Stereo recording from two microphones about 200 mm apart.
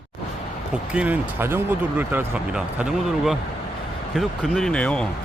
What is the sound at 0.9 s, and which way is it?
Speech, 5° right (ahead or behind).